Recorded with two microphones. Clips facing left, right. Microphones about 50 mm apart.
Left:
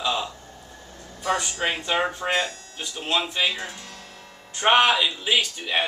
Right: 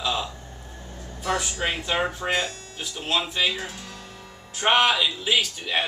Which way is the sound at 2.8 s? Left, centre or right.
Centre.